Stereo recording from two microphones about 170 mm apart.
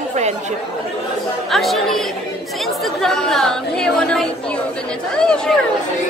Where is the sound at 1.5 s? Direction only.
Centre (ahead or behind).